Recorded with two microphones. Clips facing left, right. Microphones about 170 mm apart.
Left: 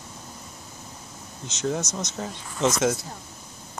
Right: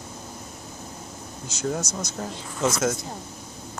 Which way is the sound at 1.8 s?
20° left (ahead or behind).